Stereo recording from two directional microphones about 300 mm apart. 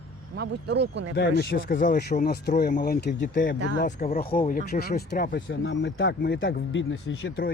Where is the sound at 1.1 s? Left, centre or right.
Left.